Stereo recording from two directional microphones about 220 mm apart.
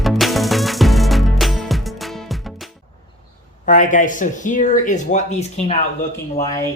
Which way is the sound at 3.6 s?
35° left (ahead or behind).